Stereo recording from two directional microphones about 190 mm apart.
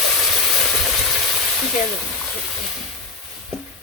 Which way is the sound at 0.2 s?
Centre (ahead or behind).